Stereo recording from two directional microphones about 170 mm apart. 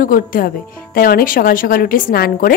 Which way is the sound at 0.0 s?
55° left (ahead or behind).